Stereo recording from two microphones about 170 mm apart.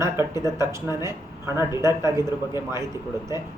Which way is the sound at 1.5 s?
15° right (ahead or behind).